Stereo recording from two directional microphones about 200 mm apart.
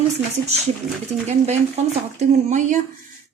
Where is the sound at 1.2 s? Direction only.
35° right (ahead or behind).